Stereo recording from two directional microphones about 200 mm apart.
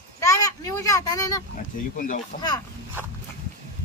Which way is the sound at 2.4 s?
20° left (ahead or behind).